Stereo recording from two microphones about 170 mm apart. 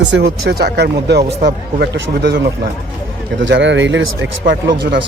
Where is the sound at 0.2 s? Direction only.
75° right (ahead or behind).